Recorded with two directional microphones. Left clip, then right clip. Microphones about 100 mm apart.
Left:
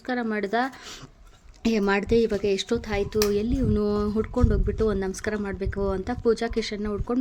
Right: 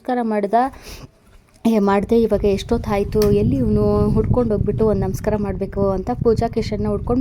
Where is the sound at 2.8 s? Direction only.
60° right (ahead or behind).